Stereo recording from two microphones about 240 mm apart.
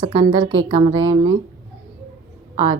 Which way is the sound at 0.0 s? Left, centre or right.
Right.